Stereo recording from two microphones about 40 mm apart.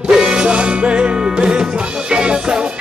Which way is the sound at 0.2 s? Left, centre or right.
Right.